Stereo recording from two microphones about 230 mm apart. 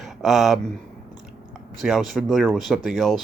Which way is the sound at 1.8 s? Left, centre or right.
Centre.